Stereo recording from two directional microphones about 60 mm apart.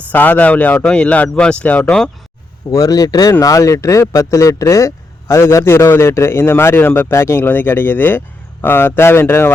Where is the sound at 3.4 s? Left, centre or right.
Left.